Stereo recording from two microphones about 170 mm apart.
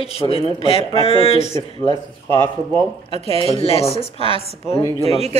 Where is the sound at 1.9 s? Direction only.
25° right (ahead or behind).